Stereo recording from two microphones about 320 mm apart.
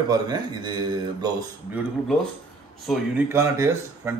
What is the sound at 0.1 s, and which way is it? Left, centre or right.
A man's voice, centre.